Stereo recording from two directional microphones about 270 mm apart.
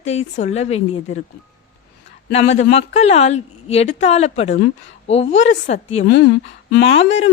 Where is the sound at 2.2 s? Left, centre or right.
Left.